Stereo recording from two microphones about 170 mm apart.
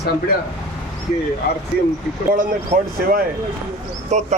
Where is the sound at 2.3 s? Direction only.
50° right (ahead or behind).